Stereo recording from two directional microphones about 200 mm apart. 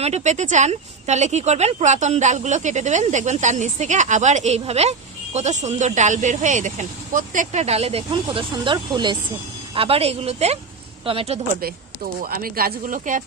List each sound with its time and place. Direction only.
0.0 s a woman's voice: 35° right (ahead or behind)
12.2 s speech: 45° right (ahead or behind)